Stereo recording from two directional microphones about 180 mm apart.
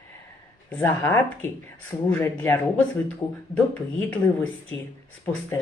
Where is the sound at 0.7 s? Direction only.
10° left (ahead or behind).